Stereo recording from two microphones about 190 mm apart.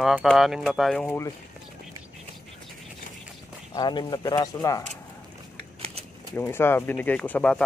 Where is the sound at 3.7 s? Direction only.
20° left (ahead or behind).